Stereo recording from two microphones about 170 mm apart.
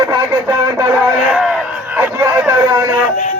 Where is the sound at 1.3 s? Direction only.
Centre (ahead or behind).